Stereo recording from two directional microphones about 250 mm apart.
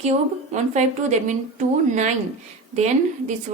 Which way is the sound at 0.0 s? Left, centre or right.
Right.